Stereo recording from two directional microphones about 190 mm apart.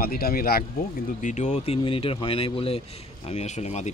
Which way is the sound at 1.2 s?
40° left (ahead or behind).